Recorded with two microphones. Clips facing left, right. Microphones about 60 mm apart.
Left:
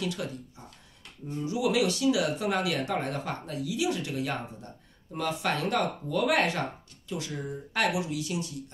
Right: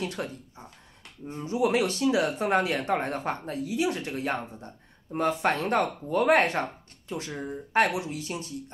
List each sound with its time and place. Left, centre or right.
0.0 s speech: right